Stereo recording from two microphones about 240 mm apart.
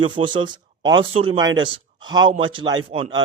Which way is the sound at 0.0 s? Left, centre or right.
Right.